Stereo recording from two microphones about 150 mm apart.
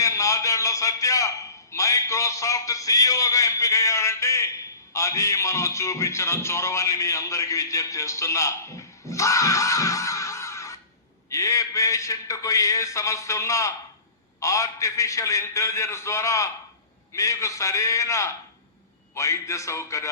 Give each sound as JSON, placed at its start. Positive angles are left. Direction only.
{"t": 0.0, "sound": "a man's voice", "side_deg": 20}
{"t": 9.0, "sound": "screaming", "side_deg": 20}
{"t": 11.3, "sound": "speech", "side_deg": 20}